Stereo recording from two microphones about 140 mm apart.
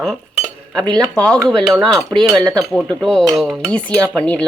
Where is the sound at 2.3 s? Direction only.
30° right (ahead or behind).